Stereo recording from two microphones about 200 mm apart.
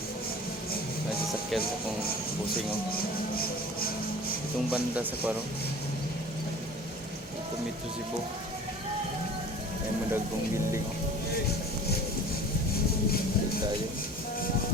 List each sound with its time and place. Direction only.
2.9 s music: 50° left (ahead or behind)
4.7 s speech: 10° right (ahead or behind)